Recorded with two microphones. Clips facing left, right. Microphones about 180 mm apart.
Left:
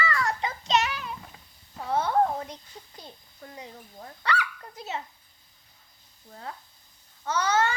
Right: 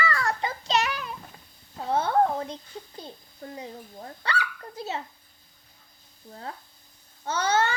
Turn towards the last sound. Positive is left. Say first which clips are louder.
# even
turn(degrees=-30)  # may be behind; listen again after turning